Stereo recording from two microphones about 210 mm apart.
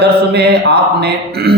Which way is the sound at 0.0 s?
50° right (ahead or behind).